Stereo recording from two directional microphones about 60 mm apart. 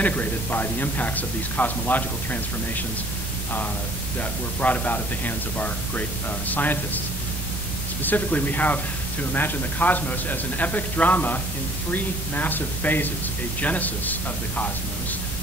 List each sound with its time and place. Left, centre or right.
0.0 s a man's voice: left
4.2 s a man's voice: left
8.0 s a man's voice: left